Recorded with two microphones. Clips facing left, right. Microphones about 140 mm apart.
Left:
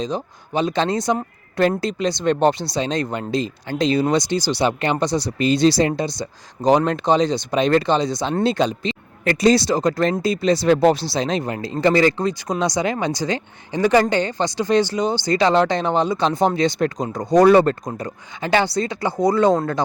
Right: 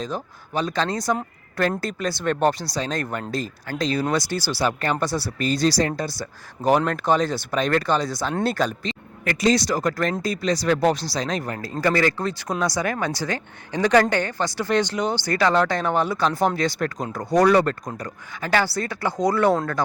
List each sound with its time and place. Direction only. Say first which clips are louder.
0.6 s speech: left 4 dB; 25° left (ahead or behind)
9.2 s speech: left 4 dB; 35° left (ahead or behind); by 19.5 s 15° left (ahead or behind)